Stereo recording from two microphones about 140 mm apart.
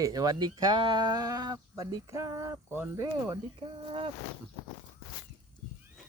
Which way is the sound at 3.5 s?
40° right (ahead or behind).